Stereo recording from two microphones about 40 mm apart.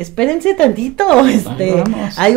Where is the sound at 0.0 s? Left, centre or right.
Left.